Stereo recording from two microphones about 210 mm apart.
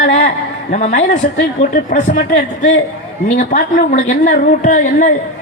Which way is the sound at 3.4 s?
35° left (ahead or behind).